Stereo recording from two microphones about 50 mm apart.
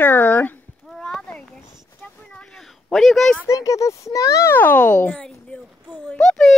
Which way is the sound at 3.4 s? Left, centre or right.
Left.